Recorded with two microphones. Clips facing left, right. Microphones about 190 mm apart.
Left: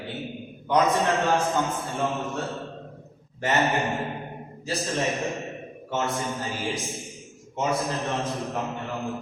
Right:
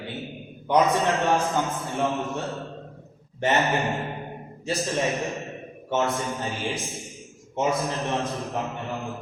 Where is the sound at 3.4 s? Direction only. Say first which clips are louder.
Right 2 dB; 20° right (ahead or behind).